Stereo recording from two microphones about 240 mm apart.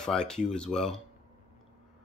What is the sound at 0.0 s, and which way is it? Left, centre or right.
Speech, centre.